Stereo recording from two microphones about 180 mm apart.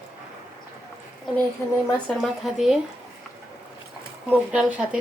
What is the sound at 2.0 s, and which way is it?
Speech, centre (ahead or behind).